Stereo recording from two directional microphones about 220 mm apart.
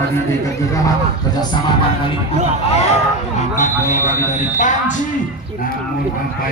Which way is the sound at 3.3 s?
35° left (ahead or behind).